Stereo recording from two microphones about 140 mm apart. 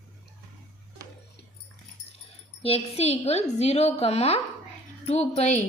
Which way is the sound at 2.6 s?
45° left (ahead or behind).